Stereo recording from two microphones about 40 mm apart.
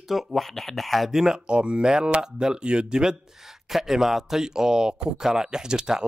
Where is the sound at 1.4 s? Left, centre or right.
Right.